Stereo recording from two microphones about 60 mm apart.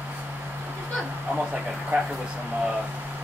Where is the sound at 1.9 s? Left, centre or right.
Right.